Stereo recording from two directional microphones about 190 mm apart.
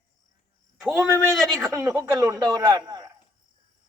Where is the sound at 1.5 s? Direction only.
15° right (ahead or behind).